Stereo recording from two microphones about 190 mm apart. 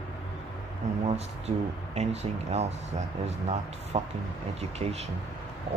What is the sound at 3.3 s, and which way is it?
Speech, 35° right (ahead or behind).